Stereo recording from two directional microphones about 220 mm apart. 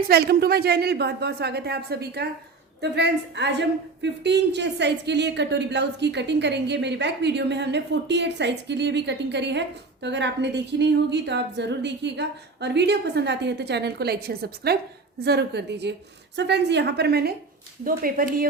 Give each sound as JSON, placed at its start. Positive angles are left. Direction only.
{"t": 0.1, "sound": "a woman's voice", "side_deg": -45}